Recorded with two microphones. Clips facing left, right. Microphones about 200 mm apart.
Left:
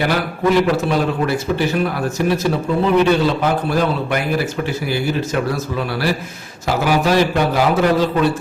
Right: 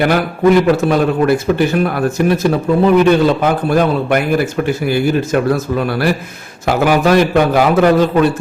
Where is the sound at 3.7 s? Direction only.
55° right (ahead or behind).